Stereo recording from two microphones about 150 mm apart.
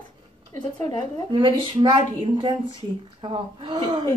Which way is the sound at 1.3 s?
35° right (ahead or behind).